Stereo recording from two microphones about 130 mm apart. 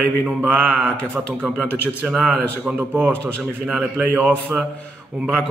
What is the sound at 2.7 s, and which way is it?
A man's voice, 15° right (ahead or behind).